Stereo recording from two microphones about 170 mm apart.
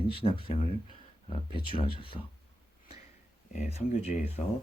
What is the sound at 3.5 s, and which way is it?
Speech, 40° left (ahead or behind).